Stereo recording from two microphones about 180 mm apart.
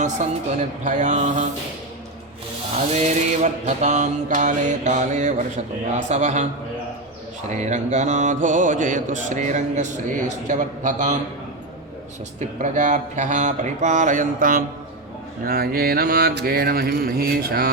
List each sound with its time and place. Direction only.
0.2 s mantra: 40° right (ahead or behind)
2.9 s mantra: 40° right (ahead or behind)
7.5 s mantra: 40° right (ahead or behind)
12.4 s mantra: 45° right (ahead or behind)